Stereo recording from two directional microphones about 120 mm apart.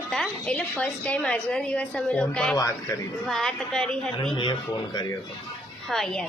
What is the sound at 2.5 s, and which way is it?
Speech, 25° left (ahead or behind).